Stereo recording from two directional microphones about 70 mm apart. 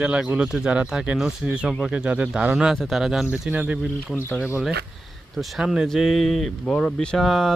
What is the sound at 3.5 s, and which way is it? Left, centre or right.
Speech, right.